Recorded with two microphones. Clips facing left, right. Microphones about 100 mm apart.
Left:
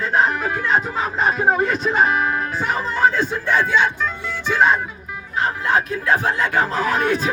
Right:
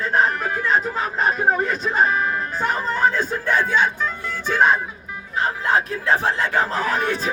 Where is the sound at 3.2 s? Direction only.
40° right (ahead or behind).